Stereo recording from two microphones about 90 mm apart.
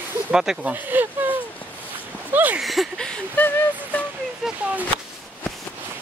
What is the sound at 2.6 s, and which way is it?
Speech, centre (ahead or behind).